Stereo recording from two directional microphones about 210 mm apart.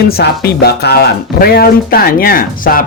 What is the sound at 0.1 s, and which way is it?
Speech, 50° left (ahead or behind).